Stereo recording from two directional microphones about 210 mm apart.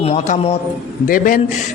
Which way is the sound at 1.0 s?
40° left (ahead or behind).